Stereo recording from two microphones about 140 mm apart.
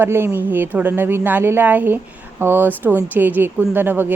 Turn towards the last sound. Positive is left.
turn(degrees=-15)  # may be behind; listen again after turning